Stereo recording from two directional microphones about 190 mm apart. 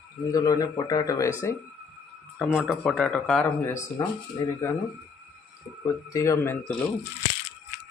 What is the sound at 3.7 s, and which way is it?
Speech, 15° left (ahead or behind).